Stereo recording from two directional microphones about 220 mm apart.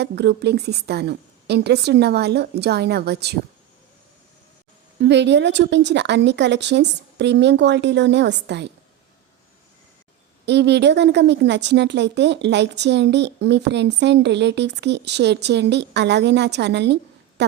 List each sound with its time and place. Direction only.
0.0 s a woman's voice: 50° right (ahead or behind)
4.9 s a woman's voice: 50° right (ahead or behind)
10.4 s a woman's voice: 50° right (ahead or behind)